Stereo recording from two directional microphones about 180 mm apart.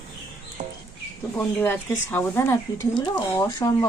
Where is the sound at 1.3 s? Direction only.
15° left (ahead or behind).